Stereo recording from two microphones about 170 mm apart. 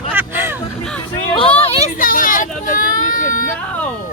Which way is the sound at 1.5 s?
35° left (ahead or behind).